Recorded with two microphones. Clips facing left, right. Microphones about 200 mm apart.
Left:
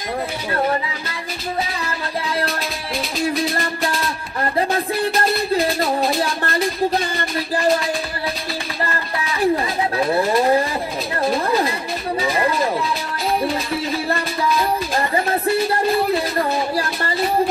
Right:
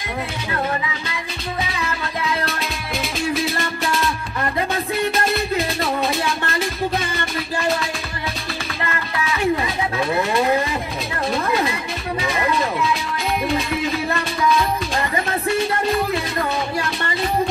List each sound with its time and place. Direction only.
1.6 s music: 30° left (ahead or behind)
3.2 s music: centre (ahead or behind)
4.0 s music: 30° left (ahead or behind)
8.8 s a sound: 35° left (ahead or behind)
12.2 s music: 35° left (ahead or behind)